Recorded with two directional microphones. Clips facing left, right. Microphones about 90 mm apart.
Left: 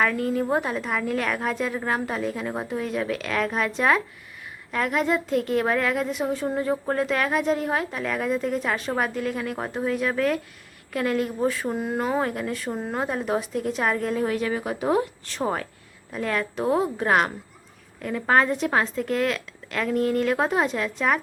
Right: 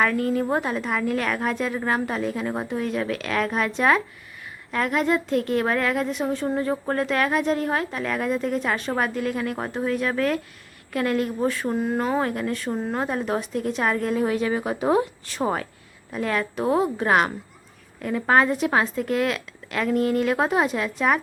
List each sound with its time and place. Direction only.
0.0 s a woman's voice: centre (ahead or behind)
14.3 s speech: 20° right (ahead or behind)
15.2 s a woman's voice: 10° right (ahead or behind)